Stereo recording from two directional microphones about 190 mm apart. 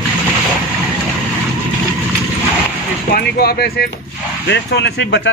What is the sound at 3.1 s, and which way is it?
Speech, 55° left (ahead or behind).